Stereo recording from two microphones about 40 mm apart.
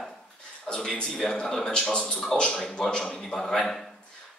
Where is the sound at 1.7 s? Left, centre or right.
Left.